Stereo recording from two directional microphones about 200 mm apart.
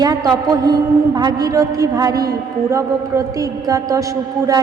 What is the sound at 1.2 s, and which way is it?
A woman's voice, 20° right (ahead or behind).